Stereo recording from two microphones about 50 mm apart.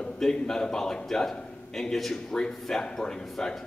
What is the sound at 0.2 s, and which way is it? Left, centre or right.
A man's voice, centre.